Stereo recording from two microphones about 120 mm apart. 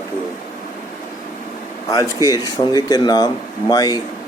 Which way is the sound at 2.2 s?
35° left (ahead or behind).